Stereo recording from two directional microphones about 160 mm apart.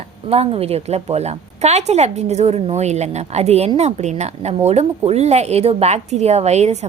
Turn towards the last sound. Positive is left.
turn(degrees=-45)  # may be behind; listen again after turning